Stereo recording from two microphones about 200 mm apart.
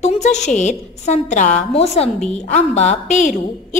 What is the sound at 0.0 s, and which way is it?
A woman's voice, 35° left (ahead or behind).